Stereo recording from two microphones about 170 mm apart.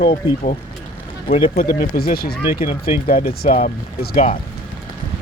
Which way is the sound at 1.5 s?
60° left (ahead or behind).